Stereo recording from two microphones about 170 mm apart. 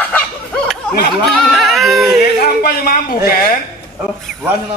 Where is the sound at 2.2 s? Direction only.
65° left (ahead or behind).